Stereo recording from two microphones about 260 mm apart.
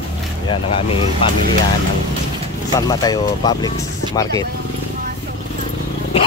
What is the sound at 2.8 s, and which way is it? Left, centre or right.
Speech, centre.